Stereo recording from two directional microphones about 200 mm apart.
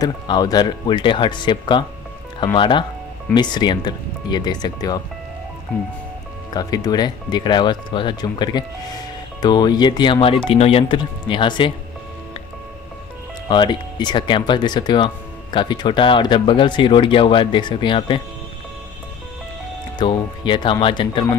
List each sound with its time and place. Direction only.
0.0 s speech: 20° left (ahead or behind)
6.5 s speech: 20° left (ahead or behind)
13.5 s speech: 20° left (ahead or behind)
20.0 s speech: 25° left (ahead or behind)